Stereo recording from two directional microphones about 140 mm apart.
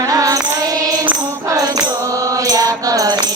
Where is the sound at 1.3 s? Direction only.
25° right (ahead or behind).